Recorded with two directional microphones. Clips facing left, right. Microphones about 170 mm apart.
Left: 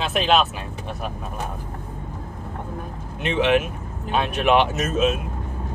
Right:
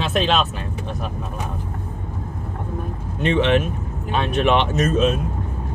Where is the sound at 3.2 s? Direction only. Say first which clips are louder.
Right 2 dB; 10° left (ahead or behind).